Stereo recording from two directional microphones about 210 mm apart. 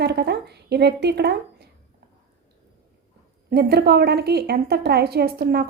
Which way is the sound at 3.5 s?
50° right (ahead or behind).